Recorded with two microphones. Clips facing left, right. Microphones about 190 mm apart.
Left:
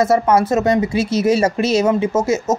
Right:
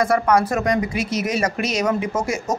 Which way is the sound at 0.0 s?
25° left (ahead or behind).